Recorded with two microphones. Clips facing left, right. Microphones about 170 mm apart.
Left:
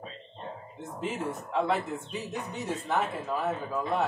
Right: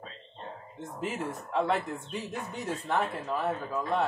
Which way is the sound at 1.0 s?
Centre (ahead or behind).